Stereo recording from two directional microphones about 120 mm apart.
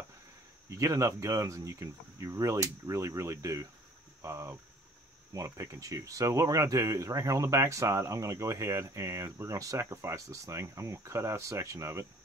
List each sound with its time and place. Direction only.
0.7 s speech: 25° right (ahead or behind)